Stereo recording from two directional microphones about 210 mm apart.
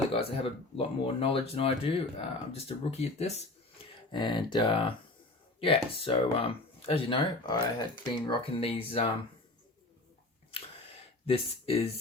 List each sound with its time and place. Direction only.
0.1 s speech: 25° left (ahead or behind)
10.5 s a sound: 30° left (ahead or behind)
11.3 s speech: 25° left (ahead or behind)